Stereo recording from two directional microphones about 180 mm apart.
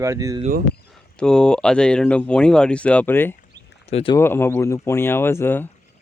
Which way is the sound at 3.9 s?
30° left (ahead or behind).